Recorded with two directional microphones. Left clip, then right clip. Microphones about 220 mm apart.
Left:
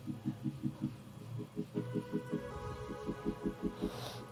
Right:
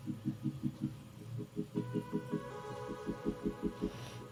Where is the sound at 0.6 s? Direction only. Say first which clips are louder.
Even; centre (ahead or behind).